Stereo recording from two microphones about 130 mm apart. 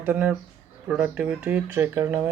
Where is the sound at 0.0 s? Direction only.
10° right (ahead or behind).